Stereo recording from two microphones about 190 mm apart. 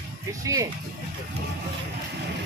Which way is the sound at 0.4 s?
15° right (ahead or behind).